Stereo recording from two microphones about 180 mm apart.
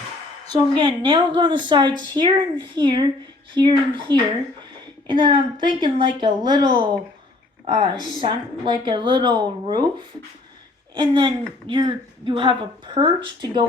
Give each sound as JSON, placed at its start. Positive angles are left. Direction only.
{"t": 0.8, "sound": "a woman's voice", "side_deg": -25}
{"t": 10.9, "sound": "a woman's voice", "side_deg": -25}